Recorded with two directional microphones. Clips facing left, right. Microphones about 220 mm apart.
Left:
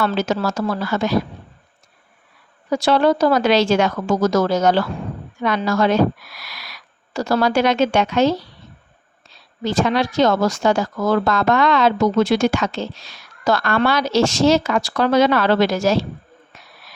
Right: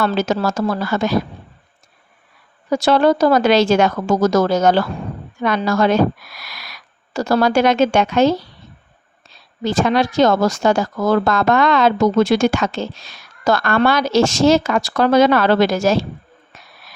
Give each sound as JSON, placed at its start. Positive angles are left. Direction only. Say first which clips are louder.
{"t": 0.0, "sound": "speech", "louder": "right 2 dB", "side_deg": -45}
{"t": 2.6, "sound": "speech", "louder": "right 2 dB", "side_deg": -45}
{"t": 9.6, "sound": "speech", "louder": "right 2 dB", "side_deg": -45}